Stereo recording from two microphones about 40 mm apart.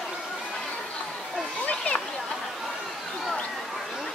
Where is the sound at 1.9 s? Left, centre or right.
Left.